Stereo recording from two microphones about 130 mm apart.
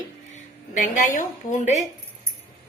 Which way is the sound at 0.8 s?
85° left.